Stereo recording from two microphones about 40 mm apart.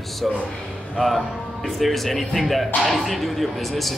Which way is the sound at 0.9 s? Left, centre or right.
Centre.